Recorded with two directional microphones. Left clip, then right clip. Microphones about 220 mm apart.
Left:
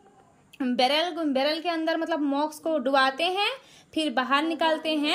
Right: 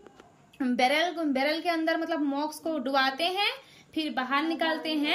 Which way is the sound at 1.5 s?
15° left (ahead or behind).